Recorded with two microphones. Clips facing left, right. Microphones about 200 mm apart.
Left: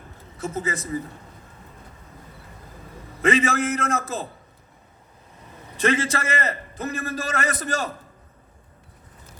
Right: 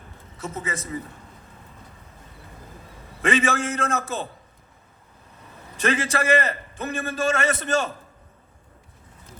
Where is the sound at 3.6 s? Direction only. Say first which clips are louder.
Left 2 dB; 30° right (ahead or behind).